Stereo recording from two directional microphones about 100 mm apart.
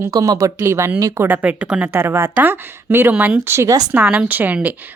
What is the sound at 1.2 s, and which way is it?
A woman's voice, 15° right (ahead or behind).